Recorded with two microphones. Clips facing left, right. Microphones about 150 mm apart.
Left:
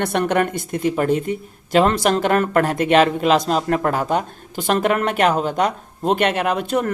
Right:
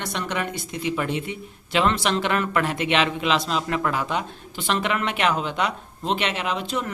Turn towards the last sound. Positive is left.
turn(degrees=55)  # may be behind; listen again after turning